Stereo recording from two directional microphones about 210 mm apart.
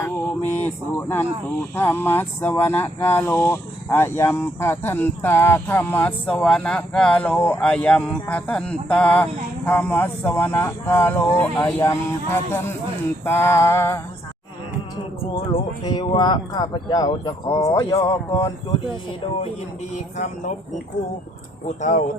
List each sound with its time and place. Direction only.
0.5 s speech: 10° left (ahead or behind)
15.2 s speech: 25° left (ahead or behind)
20.1 s speech: 35° left (ahead or behind)
21.7 s speech: 35° left (ahead or behind)